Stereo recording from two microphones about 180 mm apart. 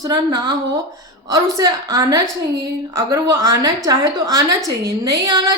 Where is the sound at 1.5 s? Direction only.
20° right (ahead or behind).